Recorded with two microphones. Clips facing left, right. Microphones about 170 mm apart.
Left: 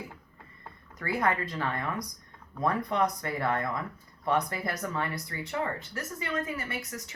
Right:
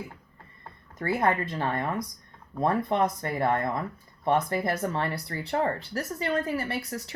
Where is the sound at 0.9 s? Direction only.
25° right (ahead or behind).